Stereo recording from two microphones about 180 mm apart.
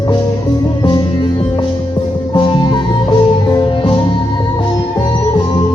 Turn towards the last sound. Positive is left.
turn(degrees=25)  # may be behind; listen again after turning